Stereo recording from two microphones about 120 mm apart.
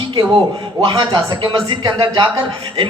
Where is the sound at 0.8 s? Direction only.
40° right (ahead or behind).